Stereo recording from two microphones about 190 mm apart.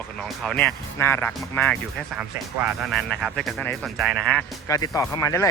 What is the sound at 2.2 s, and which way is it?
Speech, 5° right (ahead or behind).